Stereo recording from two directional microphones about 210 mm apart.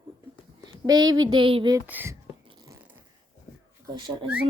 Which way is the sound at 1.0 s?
70° right (ahead or behind).